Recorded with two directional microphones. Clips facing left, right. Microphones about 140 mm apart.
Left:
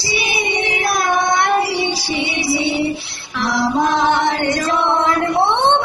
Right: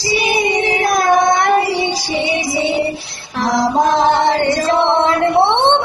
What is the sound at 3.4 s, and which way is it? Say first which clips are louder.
Music: right 3 dB; 40° right (ahead or behind).